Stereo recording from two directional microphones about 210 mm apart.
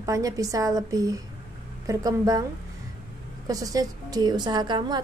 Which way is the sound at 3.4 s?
15° right (ahead or behind).